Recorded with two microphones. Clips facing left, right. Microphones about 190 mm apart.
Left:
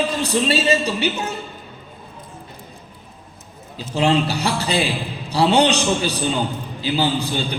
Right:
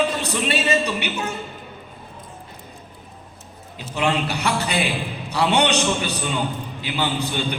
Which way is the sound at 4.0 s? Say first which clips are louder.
Left 4 dB; 30° left (ahead or behind).